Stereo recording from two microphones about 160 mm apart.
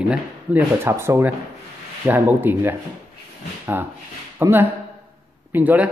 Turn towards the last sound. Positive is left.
turn(degrees=-10)  # may be behind; listen again after turning